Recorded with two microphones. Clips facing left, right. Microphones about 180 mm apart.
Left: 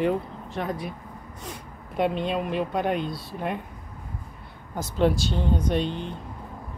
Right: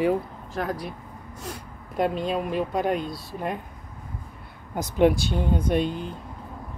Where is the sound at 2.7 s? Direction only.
Centre (ahead or behind).